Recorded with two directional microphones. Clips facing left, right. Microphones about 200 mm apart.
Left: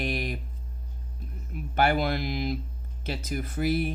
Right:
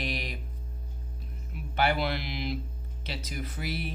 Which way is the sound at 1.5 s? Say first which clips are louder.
Left 3 dB; 45° left (ahead or behind).